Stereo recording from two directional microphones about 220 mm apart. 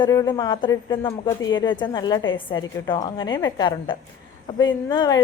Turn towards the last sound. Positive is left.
turn(degrees=20)  # may be behind; listen again after turning